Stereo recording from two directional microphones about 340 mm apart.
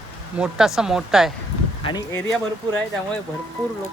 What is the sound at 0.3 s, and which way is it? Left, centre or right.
Speech, centre.